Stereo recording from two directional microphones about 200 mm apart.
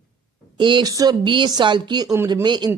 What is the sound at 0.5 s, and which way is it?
Speech, 25° right (ahead or behind).